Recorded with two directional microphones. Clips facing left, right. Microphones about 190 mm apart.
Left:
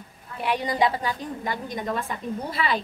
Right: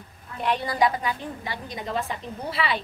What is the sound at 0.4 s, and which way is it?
Speech, 10° left (ahead or behind).